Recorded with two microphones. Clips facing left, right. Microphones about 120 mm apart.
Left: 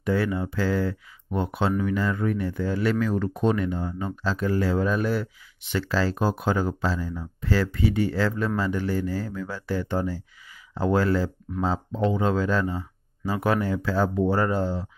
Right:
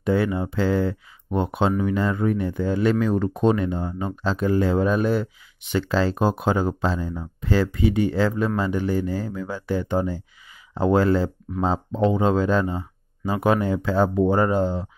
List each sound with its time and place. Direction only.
0.0 s speech: 25° right (ahead or behind)